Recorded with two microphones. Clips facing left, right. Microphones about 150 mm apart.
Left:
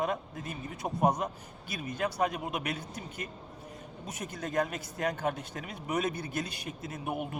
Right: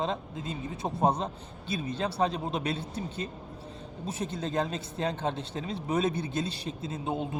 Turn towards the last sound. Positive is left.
turn(degrees=-25)  # may be behind; listen again after turning